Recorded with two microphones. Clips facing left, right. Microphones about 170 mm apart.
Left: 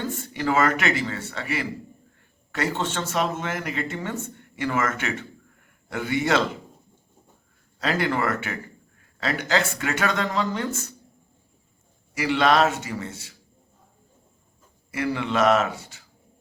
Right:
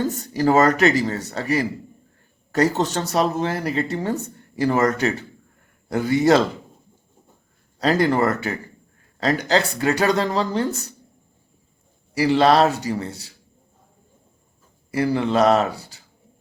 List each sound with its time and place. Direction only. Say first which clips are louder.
0.0 s speech: right 7 dB; 40° right (ahead or behind)
7.8 s speech: right 6 dB; 35° right (ahead or behind)
12.1 s speech: right 4 dB; 35° right (ahead or behind)
14.9 s speech: right 5 dB; 35° right (ahead or behind)